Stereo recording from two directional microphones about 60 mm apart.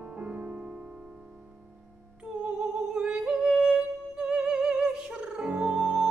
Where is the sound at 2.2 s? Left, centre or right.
Centre.